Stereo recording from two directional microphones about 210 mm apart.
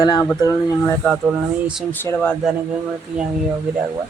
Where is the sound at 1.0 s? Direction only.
5° right (ahead or behind).